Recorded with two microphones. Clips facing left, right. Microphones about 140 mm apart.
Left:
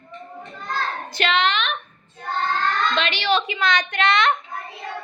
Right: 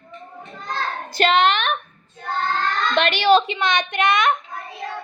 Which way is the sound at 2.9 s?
50° right (ahead or behind).